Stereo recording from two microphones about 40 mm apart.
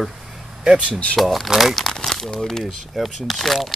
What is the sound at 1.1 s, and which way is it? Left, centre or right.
Speech, centre.